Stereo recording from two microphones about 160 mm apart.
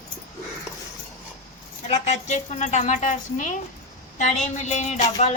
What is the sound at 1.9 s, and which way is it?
A woman's voice, 45° left (ahead or behind).